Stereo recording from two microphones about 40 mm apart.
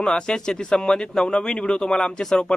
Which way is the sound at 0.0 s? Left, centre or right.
Left.